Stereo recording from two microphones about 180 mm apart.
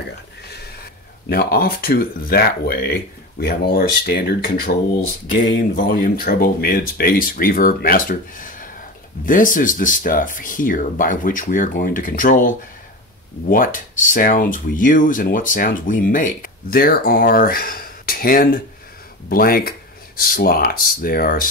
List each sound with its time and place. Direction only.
1.3 s speech: 55° left (ahead or behind)
5.8 s speech: 50° left (ahead or behind)